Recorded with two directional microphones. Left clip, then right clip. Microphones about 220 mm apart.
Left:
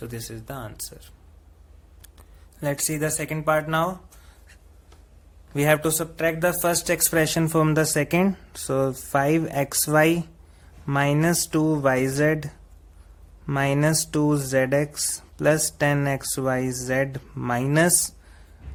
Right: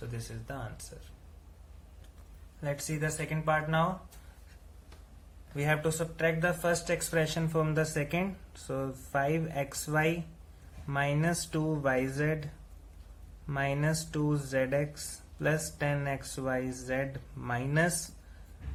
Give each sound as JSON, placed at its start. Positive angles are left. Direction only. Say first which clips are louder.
{"t": 0.4, "sound": "speech", "louder": "left 3 dB", "side_deg": 50}
{"t": 2.6, "sound": "speech", "louder": "left 9 dB", "side_deg": 50}
{"t": 5.5, "sound": "speech", "louder": "left 10 dB", "side_deg": 50}
{"t": 13.5, "sound": "speech", "louder": "left 10 dB", "side_deg": 40}